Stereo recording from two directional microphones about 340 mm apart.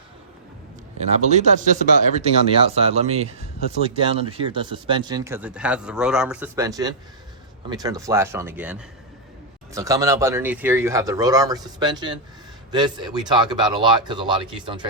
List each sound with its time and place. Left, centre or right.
0.9 s speech: centre